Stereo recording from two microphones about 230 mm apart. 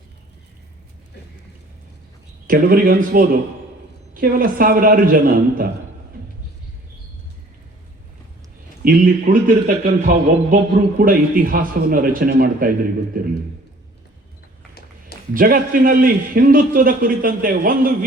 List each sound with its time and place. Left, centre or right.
2.5 s a man's voice: right
8.8 s a man's voice: right
15.4 s a man's voice: right